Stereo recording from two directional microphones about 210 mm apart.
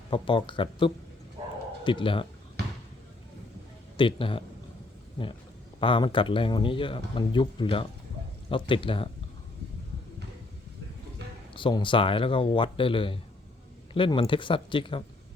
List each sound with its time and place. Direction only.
0.1 s speech: 25° left (ahead or behind)
3.9 s speech: 25° left (ahead or behind)
5.8 s speech: 25° left (ahead or behind)
11.5 s speech: 25° left (ahead or behind)